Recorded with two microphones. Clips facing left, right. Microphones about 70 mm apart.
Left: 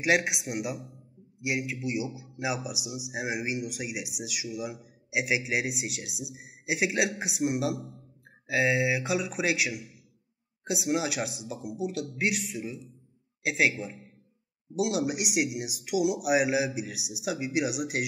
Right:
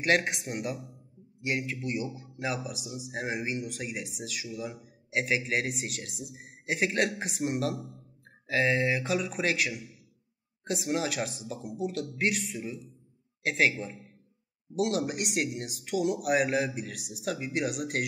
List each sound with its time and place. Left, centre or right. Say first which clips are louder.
0.0 s speech: left 1 dB; centre